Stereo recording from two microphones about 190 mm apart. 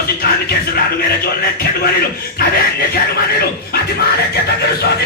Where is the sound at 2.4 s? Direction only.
50° left (ahead or behind).